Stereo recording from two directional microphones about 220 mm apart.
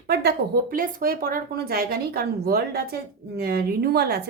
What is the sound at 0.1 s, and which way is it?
Speech, 45° right (ahead or behind).